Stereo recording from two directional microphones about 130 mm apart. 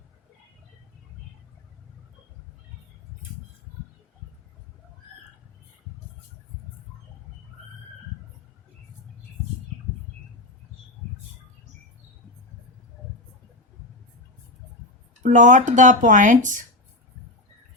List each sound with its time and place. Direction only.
15.2 s speech: 75° right (ahead or behind)